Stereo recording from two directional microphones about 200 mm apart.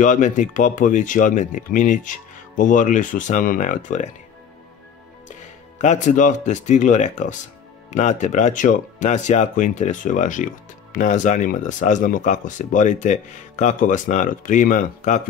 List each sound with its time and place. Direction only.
0.0 s speech: 40° left (ahead or behind)
5.8 s speech: 35° left (ahead or behind)